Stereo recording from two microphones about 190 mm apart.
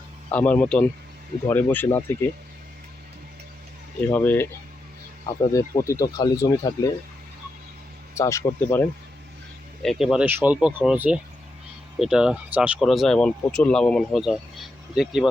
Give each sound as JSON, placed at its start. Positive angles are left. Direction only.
{"t": 0.3, "sound": "speech", "side_deg": 5}
{"t": 4.1, "sound": "speech", "side_deg": 10}
{"t": 5.5, "sound": "speech", "side_deg": 15}
{"t": 8.1, "sound": "speech", "side_deg": 15}
{"t": 9.8, "sound": "speech", "side_deg": 0}